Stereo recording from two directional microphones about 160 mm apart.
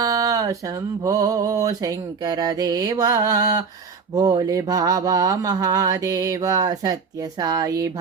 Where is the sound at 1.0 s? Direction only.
20° right (ahead or behind).